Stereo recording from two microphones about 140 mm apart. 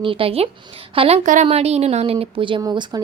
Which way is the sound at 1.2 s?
65° right (ahead or behind).